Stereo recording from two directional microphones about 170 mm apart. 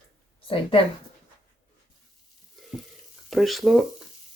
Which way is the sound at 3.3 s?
Centre (ahead or behind).